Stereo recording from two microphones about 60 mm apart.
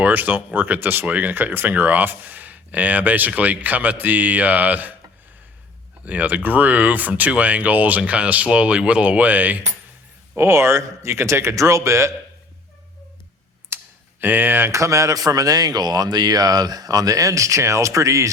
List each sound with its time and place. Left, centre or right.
0.0 s speech: right
6.1 s speech: right
10.3 s a man's voice: right
13.7 s computer keyboard: right
14.2 s speech: right
14.7 s speech: right